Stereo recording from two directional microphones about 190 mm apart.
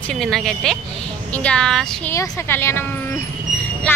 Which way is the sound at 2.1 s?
15° left (ahead or behind).